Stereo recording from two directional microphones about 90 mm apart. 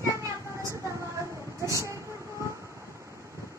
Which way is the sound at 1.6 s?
35° right (ahead or behind).